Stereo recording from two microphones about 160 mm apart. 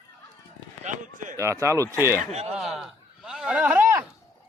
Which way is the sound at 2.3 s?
40° right (ahead or behind).